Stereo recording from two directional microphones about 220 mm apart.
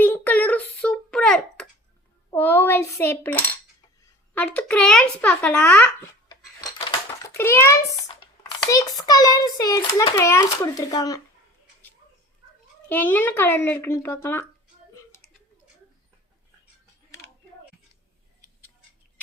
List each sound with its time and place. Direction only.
0.0 s a sound: 10° left (ahead or behind)
2.3 s dishes: 10° left (ahead or behind)
4.4 s a woman's voice: 5° left (ahead or behind)
5.2 s a sound: 5° left (ahead or behind)
7.3 s a child's voice: 10° left (ahead or behind)
12.9 s a child's voice: 10° left (ahead or behind)